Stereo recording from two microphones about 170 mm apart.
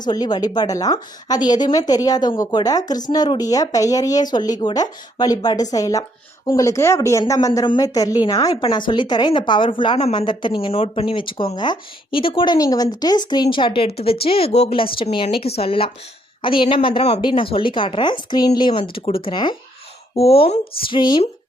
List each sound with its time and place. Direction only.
0.0 s a woman's voice: 25° left (ahead or behind)